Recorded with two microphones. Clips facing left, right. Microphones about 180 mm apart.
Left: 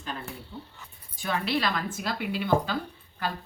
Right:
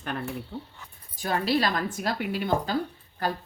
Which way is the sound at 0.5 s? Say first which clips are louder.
Right 4 dB; 90° right.